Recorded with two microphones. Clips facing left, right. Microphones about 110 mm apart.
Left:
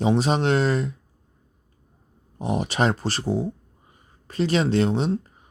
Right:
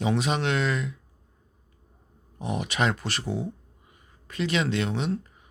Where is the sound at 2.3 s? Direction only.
35° left (ahead or behind).